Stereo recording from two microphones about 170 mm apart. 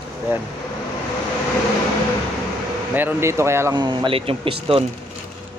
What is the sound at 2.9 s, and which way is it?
Speech, 10° right (ahead or behind).